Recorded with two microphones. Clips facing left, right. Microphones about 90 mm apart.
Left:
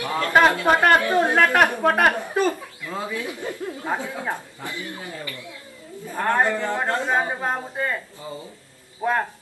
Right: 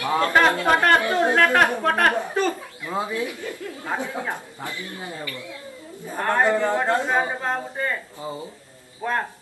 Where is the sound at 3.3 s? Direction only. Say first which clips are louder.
Left 2 dB; 25° left (ahead or behind).